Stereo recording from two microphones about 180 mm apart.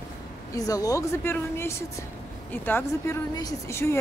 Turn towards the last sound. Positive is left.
turn(degrees=15)  # may be behind; listen again after turning